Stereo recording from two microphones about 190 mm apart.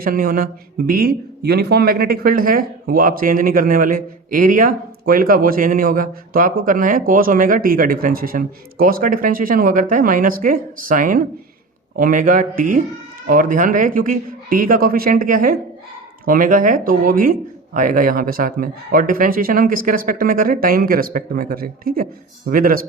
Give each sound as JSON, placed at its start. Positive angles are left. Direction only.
{"t": 0.0, "sound": "speech", "side_deg": -50}